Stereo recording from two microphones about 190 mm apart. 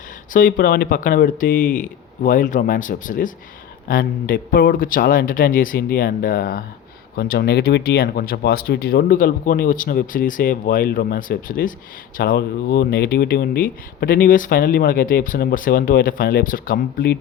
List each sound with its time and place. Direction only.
0.3 s speech: 45° left (ahead or behind)